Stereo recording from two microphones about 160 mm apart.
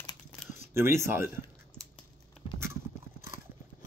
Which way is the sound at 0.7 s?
15° right (ahead or behind).